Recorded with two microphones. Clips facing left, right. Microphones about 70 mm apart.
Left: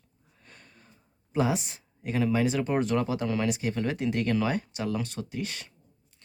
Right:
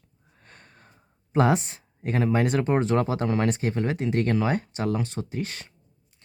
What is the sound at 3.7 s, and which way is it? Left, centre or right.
Speech, right.